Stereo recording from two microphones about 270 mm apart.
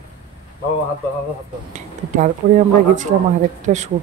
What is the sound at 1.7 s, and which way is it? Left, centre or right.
Speech, right.